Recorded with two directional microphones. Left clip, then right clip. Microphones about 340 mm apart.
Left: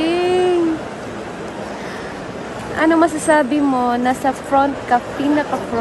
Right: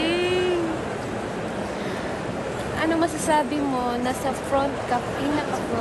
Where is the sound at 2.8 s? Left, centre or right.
Left.